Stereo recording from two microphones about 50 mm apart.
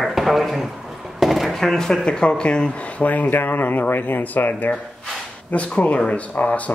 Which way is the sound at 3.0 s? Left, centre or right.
Left.